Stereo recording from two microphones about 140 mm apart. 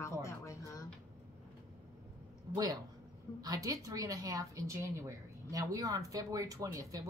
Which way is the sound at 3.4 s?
25° right (ahead or behind).